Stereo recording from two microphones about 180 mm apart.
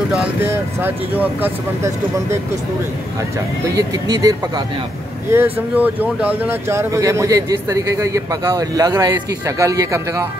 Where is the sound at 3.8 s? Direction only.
20° right (ahead or behind).